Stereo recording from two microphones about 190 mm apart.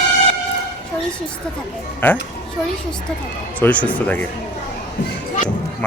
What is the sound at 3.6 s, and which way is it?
Speech, 10° left (ahead or behind).